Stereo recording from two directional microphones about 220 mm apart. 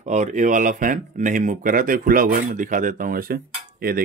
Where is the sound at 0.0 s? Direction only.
35° right (ahead or behind).